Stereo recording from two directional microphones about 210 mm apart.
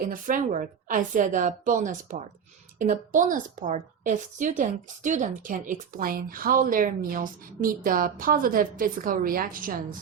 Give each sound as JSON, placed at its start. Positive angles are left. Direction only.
{"t": 0.0, "sound": "a woman's voice", "side_deg": -40}